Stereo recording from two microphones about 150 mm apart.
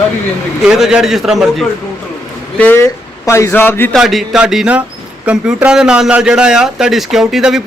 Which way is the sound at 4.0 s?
Centre (ahead or behind).